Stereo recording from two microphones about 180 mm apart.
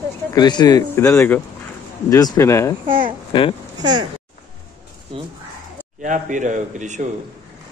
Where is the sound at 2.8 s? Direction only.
50° right (ahead or behind).